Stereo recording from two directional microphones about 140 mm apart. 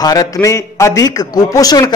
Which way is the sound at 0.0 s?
25° left (ahead or behind).